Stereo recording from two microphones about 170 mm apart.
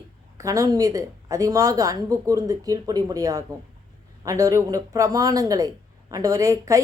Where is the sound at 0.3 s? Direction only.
20° right (ahead or behind).